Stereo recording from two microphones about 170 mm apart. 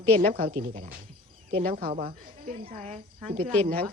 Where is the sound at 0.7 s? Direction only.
55° right (ahead or behind).